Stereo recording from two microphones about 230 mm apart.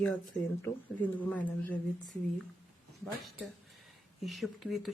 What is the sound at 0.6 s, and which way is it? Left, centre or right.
Speech, centre.